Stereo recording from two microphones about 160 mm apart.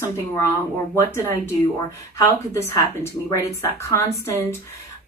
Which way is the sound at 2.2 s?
20° left (ahead or behind).